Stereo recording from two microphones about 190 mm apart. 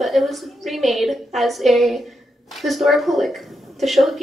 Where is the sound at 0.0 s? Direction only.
Centre (ahead or behind).